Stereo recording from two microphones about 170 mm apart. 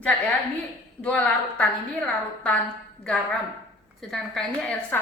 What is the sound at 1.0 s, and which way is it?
Speech, 10° left (ahead or behind).